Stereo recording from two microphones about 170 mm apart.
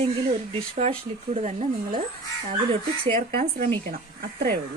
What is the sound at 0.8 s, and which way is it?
Speech, 40° right (ahead or behind).